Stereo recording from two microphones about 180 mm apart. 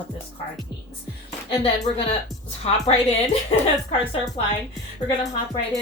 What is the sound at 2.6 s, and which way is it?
Speech, 35° left (ahead or behind).